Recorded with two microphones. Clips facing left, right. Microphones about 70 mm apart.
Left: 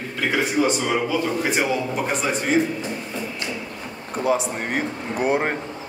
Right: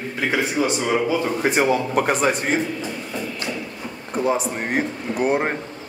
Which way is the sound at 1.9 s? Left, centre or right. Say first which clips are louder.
Right 5 dB; right.